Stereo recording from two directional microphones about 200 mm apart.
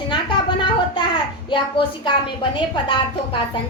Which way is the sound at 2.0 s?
25° left (ahead or behind).